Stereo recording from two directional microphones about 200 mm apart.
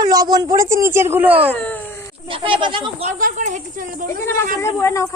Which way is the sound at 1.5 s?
10° left (ahead or behind).